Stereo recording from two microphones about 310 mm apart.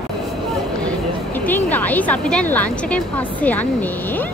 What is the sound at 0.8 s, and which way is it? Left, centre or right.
Speech, centre.